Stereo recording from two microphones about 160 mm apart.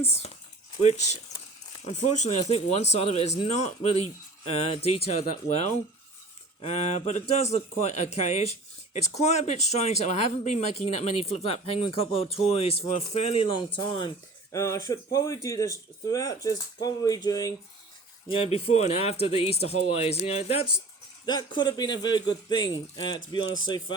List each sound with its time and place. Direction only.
0.0 s speech: 40° left (ahead or behind)
14.5 s speech: 20° left (ahead or behind)
18.3 s speech: 35° left (ahead or behind)
21.2 s speech: 25° left (ahead or behind)